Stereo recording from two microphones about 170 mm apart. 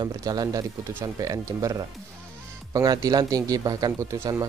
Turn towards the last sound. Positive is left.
turn(degrees=-20)  # may be behind; listen again after turning